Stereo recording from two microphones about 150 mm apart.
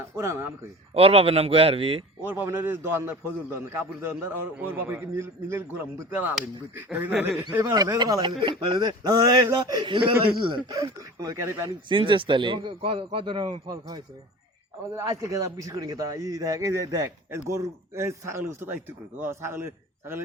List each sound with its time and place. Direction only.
0.0 s a man's voice: 20° right (ahead or behind)
0.9 s a man's voice: 40° right (ahead or behind)
2.2 s a man's voice: 15° right (ahead or behind)
7.5 s speech: 20° right (ahead or behind)
11.9 s a man's voice: 35° right (ahead or behind)
14.9 s a man's voice: 20° right (ahead or behind)